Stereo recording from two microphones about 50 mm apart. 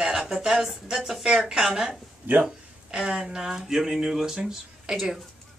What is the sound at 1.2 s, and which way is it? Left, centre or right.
Speech, centre.